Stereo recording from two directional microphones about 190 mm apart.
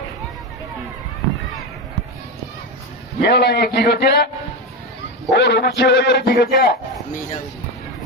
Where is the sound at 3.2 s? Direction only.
60° left (ahead or behind).